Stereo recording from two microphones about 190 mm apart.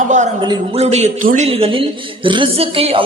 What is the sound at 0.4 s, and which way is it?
A man's voice, 25° right (ahead or behind).